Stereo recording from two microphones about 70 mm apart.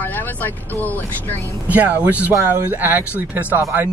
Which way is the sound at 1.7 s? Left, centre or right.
Right.